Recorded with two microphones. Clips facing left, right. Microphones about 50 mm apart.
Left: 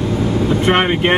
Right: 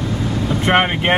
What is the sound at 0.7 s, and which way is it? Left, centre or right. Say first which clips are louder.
Boat: right 1 dB; centre.